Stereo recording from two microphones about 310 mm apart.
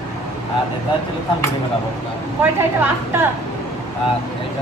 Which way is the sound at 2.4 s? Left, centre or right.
Centre.